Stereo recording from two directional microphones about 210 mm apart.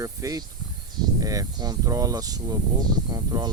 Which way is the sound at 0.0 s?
15° right (ahead or behind).